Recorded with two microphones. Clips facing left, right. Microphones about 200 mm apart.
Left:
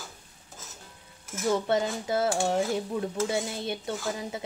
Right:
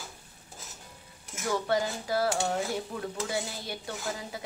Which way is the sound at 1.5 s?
25° left (ahead or behind).